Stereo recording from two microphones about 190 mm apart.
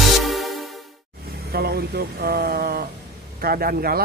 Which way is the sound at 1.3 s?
55° right (ahead or behind).